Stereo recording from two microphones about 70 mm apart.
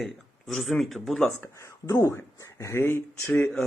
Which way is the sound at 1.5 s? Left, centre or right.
Left.